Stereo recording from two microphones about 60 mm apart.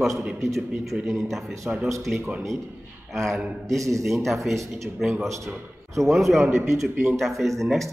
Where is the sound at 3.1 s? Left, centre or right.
Centre.